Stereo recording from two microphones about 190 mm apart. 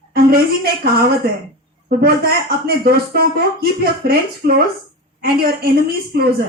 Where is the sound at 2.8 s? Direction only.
55° right (ahead or behind).